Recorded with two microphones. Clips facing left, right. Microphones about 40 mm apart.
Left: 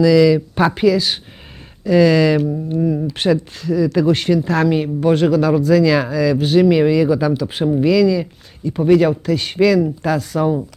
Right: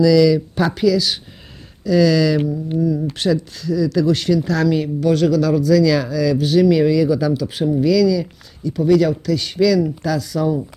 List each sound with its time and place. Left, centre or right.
0.0 s speech: left